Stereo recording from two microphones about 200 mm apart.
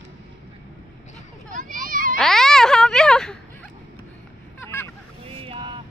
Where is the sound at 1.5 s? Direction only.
40° right (ahead or behind).